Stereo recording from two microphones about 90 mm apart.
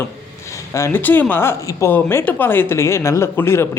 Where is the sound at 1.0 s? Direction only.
20° left (ahead or behind).